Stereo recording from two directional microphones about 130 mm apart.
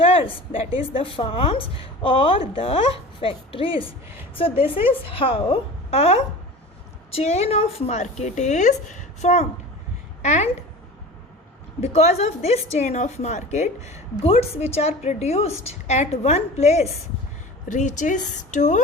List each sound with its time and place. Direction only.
0.0 s a woman's voice: 45° left (ahead or behind); by 10.5 s 60° left (ahead or behind)
11.8 s a woman's voice: 55° left (ahead or behind)
17.7 s a woman's voice: 70° left (ahead or behind)